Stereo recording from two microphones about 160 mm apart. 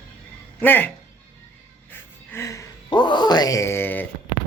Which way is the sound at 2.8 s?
30° left (ahead or behind).